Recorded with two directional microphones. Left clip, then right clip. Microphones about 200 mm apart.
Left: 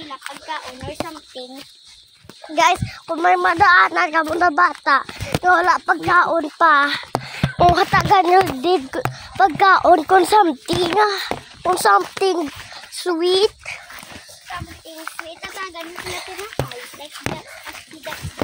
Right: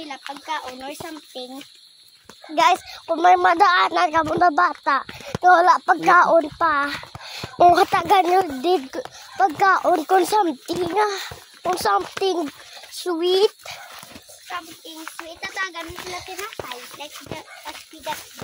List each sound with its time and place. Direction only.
0.5 s speech: 10° left (ahead or behind)
2.5 s speech: 5° left (ahead or behind)
6.0 s speech: 10° right (ahead or behind)
6.6 s speech: 30° left (ahead or behind)
7.5 s speech: 5° right (ahead or behind)
8.3 s a child's voice: 15° left (ahead or behind)
11.6 s speech: 35° left (ahead or behind)
12.2 s a child's voice: 25° left (ahead or behind)
13.7 s dog: 10° left (ahead or behind)
15.4 s speech: 5° left (ahead or behind)